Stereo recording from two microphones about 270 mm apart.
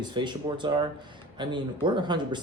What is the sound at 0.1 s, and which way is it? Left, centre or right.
Speech, centre.